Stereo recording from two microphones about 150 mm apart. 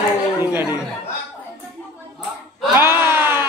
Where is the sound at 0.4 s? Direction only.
15° right (ahead or behind).